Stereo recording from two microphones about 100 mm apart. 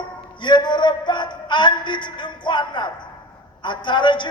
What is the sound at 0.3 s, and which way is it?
Music, 50° left (ahead or behind).